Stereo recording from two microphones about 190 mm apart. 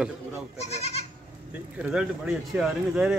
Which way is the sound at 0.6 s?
35° left (ahead or behind).